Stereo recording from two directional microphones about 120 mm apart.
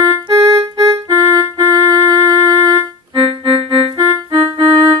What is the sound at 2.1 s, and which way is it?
Shofar, 30° right (ahead or behind).